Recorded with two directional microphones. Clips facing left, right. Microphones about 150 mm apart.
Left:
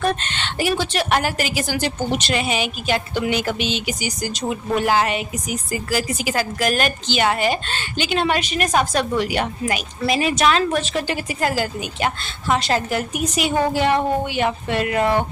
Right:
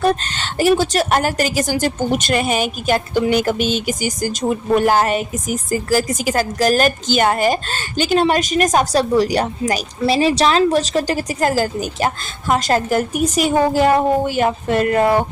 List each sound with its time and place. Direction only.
0.0 s a woman's voice: 35° right (ahead or behind)